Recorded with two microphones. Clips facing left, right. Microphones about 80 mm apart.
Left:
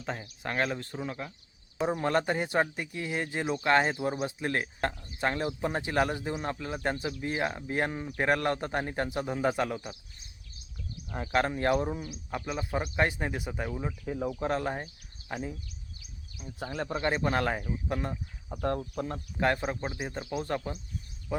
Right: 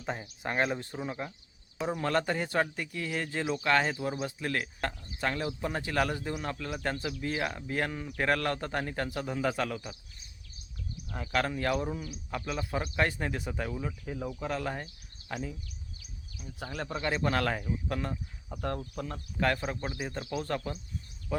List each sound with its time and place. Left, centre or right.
0.0 s speech: centre
1.9 s speech: left
11.1 s speech: left
14.3 s speech: left
15.3 s speech: centre
16.6 s speech: left
18.1 s speech: centre
19.6 s speech: left